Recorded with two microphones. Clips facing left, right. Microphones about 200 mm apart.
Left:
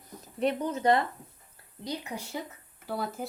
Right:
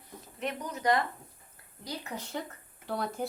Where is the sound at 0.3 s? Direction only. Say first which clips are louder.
Left 8 dB; 30° left (ahead or behind).